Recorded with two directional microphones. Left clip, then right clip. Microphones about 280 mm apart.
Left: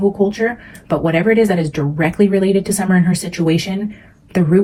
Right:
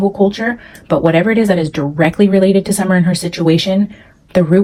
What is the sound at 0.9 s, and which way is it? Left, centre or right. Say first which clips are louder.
Speech: right 3 dB; right.